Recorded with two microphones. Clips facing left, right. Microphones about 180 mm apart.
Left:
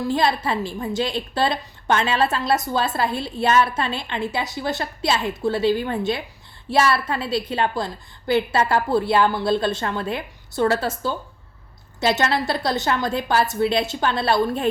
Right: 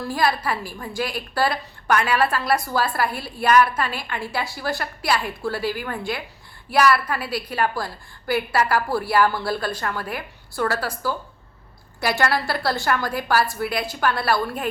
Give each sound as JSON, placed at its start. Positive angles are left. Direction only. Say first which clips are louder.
{"t": 0.1, "sound": "a woman's voice", "louder": "even", "side_deg": 25}